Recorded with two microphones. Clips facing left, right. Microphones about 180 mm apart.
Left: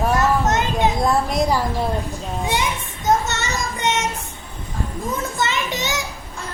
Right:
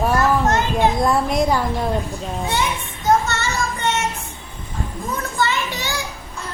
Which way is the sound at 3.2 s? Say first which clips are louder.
Right 2 dB; 20° left (ahead or behind).